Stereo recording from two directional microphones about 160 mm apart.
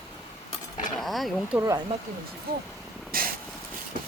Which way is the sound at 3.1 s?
65° right (ahead or behind).